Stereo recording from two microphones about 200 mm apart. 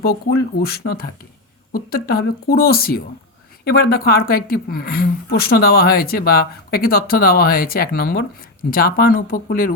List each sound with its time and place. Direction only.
0.0 s speech: 50° left (ahead or behind)